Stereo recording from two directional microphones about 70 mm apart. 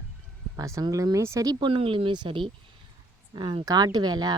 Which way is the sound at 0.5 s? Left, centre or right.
Right.